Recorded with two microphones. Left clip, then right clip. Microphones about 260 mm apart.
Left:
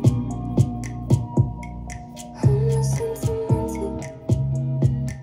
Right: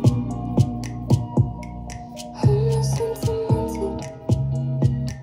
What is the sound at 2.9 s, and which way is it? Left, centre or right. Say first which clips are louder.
Music: right 2 dB; right.